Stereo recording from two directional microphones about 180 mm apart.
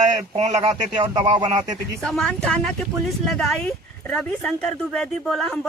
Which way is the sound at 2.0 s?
5° left (ahead or behind).